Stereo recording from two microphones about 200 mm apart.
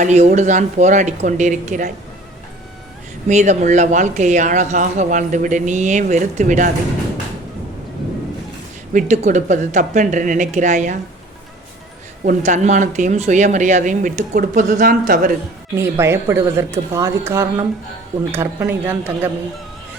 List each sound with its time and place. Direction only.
0.0 s speech: 35° right (ahead or behind)
3.2 s speech: 35° right (ahead or behind)
8.9 s speech: 35° right (ahead or behind)
12.2 s speech: 40° right (ahead or behind)
15.7 s a woman's voice: 15° right (ahead or behind)